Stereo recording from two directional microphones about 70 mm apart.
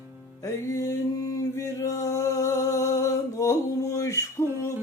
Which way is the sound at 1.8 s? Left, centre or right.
Left.